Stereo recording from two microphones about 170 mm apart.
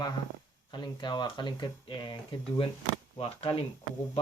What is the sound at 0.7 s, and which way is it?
Speech, 30° left (ahead or behind).